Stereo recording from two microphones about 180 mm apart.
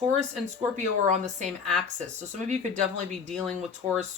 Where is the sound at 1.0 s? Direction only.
40° right (ahead or behind).